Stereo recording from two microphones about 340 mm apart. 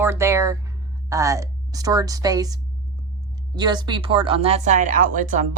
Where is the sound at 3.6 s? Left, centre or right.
Centre.